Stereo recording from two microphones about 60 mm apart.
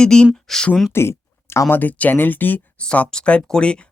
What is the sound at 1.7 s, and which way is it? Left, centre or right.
Speech, left.